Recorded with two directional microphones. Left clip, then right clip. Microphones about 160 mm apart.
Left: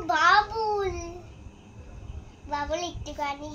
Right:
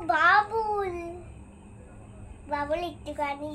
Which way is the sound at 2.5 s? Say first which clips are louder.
Right 1 dB; 10° right (ahead or behind).